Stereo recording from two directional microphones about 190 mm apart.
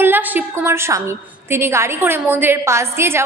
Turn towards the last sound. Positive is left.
turn(degrees=-15)  # may be behind; listen again after turning